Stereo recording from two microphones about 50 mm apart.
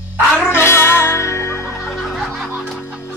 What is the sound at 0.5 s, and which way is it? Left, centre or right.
Music, left.